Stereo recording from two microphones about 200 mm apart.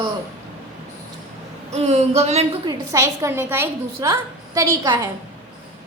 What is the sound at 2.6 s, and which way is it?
A woman's voice, 20° right (ahead or behind).